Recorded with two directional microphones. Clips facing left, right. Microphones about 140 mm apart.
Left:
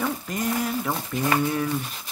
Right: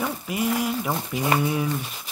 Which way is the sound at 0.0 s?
10° right (ahead or behind).